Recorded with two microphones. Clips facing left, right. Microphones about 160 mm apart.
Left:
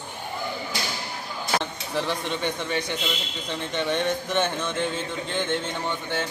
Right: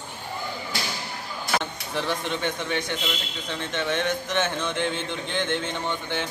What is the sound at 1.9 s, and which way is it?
A man's voice, 5° left (ahead or behind).